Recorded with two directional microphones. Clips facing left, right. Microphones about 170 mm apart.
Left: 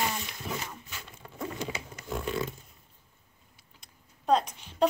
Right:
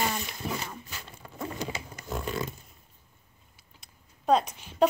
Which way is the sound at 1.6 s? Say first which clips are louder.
Right 1 dB; 40° right (ahead or behind).